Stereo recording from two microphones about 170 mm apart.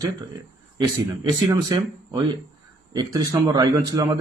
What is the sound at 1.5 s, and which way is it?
Speech, 20° right (ahead or behind).